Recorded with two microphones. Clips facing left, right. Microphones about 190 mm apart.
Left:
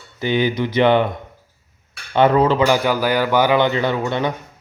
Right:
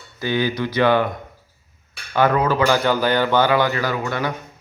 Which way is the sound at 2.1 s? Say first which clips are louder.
Left 3 dB; 25° left (ahead or behind).